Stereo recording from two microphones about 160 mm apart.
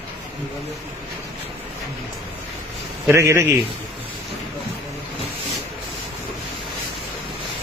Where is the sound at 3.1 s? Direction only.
15° right (ahead or behind).